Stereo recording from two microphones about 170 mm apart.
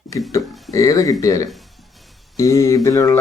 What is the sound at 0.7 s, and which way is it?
Mantra, 20° left (ahead or behind).